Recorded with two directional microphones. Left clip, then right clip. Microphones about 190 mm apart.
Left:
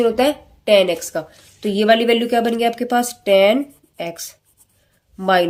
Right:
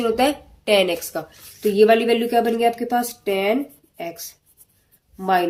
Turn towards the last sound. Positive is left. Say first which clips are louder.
# left 4 dB
turn(degrees=40)  # may be behind; listen again after turning